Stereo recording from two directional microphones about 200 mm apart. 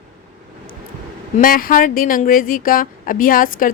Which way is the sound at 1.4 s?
45° left (ahead or behind).